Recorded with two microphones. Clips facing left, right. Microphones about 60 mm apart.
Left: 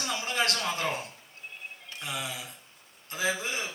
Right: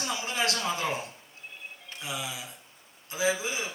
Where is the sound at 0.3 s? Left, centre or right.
Left.